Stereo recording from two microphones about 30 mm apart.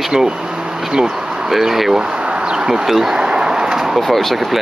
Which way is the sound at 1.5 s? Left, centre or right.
Centre.